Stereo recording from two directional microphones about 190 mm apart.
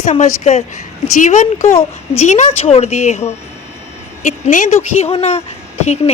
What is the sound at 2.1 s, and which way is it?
Speech, 35° left (ahead or behind).